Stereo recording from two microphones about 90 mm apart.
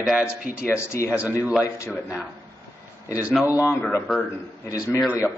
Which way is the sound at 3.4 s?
20° right (ahead or behind).